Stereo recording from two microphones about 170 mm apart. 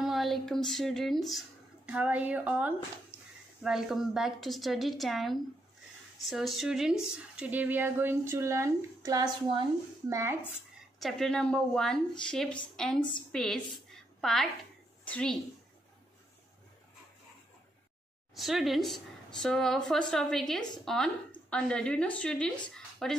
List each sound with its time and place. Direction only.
0.0 s a woman's voice: centre (ahead or behind); by 10.3 s 15° right (ahead or behind)
11.0 s a woman's voice: centre (ahead or behind)
18.3 s a woman's voice: centre (ahead or behind)